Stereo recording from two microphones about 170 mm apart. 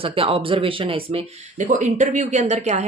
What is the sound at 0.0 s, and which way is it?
Speech, 35° right (ahead or behind).